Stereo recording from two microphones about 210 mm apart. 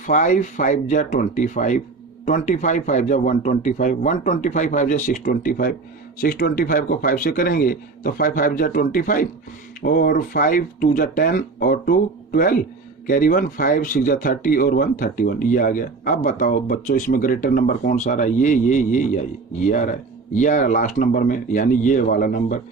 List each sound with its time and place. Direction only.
0.0 s speech: 35° left (ahead or behind)